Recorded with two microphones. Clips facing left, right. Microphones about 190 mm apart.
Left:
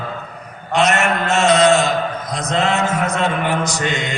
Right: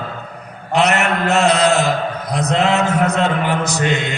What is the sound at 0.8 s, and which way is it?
Mantra, 65° right (ahead or behind).